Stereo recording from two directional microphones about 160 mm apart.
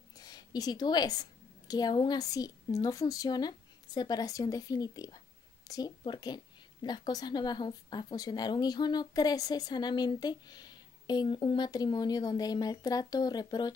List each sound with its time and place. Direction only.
0.2 s a woman's voice: 25° left (ahead or behind)